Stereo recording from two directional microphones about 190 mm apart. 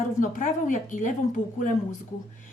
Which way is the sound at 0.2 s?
45° left (ahead or behind).